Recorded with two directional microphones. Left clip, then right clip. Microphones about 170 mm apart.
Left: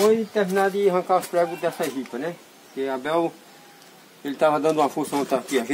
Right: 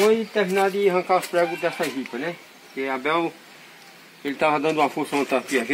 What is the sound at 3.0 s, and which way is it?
Speech, 55° left (ahead or behind).